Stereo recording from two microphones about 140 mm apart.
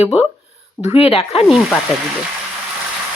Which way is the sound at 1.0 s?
45° left (ahead or behind).